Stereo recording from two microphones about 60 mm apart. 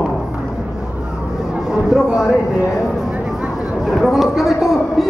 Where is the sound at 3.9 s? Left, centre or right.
Centre.